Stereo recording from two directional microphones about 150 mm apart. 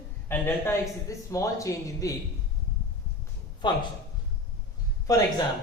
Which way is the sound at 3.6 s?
30° left (ahead or behind).